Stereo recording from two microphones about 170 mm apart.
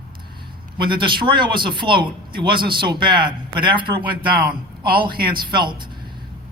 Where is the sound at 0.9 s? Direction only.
30° right (ahead or behind).